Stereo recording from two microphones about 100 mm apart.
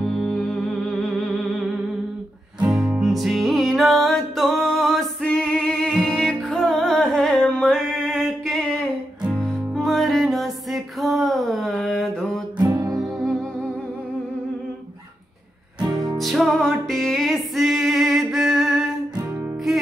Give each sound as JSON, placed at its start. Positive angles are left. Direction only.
{"t": 0.0, "sound": "music", "side_deg": 5}
{"t": 3.0, "sound": "music", "side_deg": 0}
{"t": 12.5, "sound": "music", "side_deg": -35}
{"t": 13.0, "sound": "music", "side_deg": 0}
{"t": 16.2, "sound": "music", "side_deg": 0}